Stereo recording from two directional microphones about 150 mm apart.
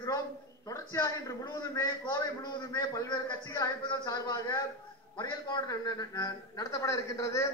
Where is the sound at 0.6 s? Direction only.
20° left (ahead or behind).